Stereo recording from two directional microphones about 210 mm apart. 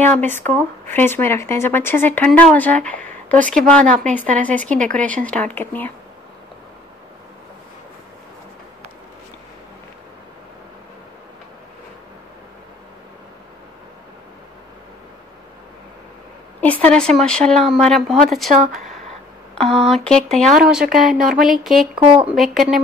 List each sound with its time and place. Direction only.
0.0 s speech: 10° left (ahead or behind)
16.6 s speech: 5° left (ahead or behind)
19.5 s a sound: centre (ahead or behind)
19.9 s speech: 5° left (ahead or behind)